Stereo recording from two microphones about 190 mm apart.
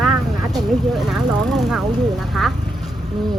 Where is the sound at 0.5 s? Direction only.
Centre (ahead or behind).